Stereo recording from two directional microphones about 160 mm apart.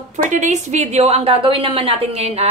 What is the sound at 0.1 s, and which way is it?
A woman's voice, 45° right (ahead or behind).